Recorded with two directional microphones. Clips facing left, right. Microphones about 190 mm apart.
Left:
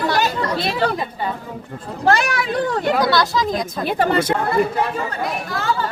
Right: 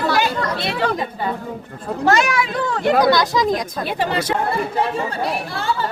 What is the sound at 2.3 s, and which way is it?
Speech, 35° left (ahead or behind).